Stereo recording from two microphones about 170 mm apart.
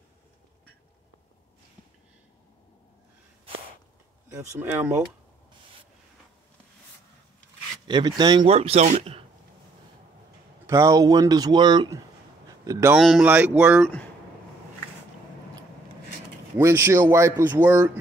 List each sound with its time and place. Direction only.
4.6 s speech: 10° right (ahead or behind)
7.8 s speech: 25° right (ahead or behind)
8.5 s speech: 40° right (ahead or behind)
10.7 s speech: 20° right (ahead or behind)
12.9 s speech: 5° right (ahead or behind)
16.5 s speech: 15° right (ahead or behind)